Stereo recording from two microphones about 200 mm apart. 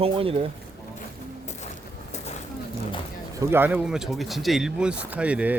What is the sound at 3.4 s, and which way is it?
Speech, 10° right (ahead or behind).